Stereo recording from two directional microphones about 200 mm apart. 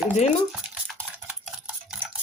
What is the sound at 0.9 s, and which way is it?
Stir, 5° right (ahead or behind).